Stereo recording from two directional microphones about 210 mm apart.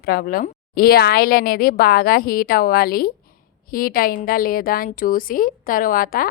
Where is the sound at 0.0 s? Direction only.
45° left (ahead or behind).